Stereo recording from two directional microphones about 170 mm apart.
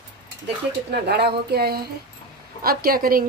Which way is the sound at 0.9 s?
75° right (ahead or behind).